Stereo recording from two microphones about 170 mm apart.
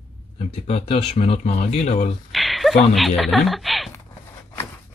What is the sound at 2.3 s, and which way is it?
Speech, centre (ahead or behind).